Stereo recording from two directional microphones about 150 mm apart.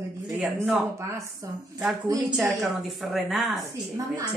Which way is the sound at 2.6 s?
Centre (ahead or behind).